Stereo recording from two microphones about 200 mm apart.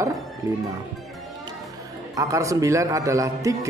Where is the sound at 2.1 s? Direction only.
15° right (ahead or behind).